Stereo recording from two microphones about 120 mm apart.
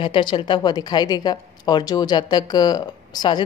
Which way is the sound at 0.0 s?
40° left (ahead or behind).